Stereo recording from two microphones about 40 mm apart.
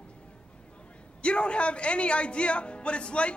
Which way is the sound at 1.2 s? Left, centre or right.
Left.